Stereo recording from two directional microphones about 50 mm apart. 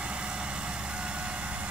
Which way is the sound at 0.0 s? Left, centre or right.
Right.